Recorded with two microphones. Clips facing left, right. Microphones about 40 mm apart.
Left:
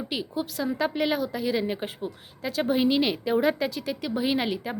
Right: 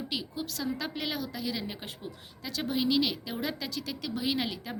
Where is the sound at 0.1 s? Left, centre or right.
Left.